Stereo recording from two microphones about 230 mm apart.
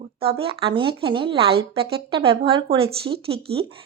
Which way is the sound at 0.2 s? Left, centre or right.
Right.